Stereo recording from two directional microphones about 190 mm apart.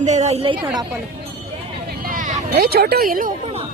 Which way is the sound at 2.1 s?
50° right (ahead or behind).